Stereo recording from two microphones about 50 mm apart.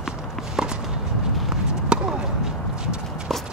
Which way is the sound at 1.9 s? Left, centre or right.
Centre.